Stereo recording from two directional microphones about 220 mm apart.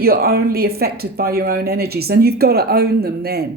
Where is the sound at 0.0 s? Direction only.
45° right (ahead or behind).